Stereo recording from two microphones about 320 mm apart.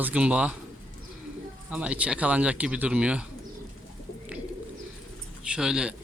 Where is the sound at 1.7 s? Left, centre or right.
Centre.